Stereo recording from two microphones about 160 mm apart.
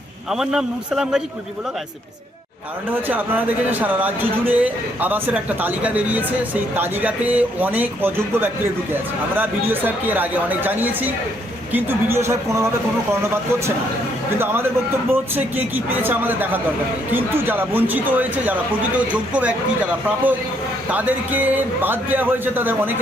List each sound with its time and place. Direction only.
0.3 s a man's voice: 5° right (ahead or behind)
2.9 s speech: 10° right (ahead or behind)
14.3 s speech: 15° right (ahead or behind)